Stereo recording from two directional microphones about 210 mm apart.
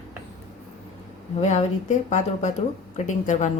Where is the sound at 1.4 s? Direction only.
30° left (ahead or behind).